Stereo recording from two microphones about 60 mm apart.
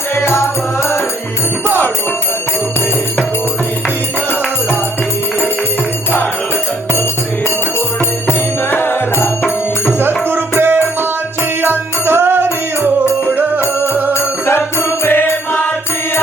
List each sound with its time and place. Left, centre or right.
0.2 s music: left
8.3 s music: left
10.6 s music: right
14.1 s music: left